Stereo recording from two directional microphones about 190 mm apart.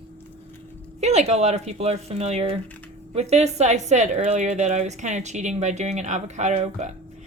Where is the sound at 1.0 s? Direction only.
35° right (ahead or behind).